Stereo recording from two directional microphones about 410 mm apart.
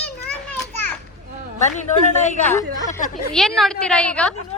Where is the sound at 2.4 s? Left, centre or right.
Centre.